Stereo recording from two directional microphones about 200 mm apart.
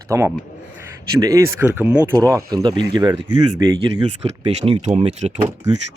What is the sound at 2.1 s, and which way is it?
Speech, 15° right (ahead or behind).